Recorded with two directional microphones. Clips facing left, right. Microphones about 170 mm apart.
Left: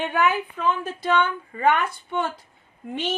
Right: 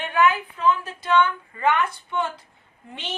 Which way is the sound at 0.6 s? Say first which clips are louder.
Right 2 dB; 55° left (ahead or behind).